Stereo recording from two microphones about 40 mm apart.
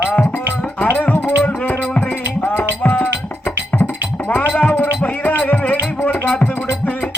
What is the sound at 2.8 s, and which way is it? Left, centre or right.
Music, left.